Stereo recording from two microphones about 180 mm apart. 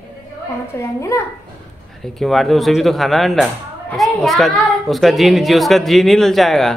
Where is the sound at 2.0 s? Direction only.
Centre (ahead or behind).